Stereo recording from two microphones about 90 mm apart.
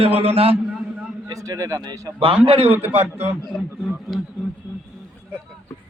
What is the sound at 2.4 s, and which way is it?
Speech, 85° right.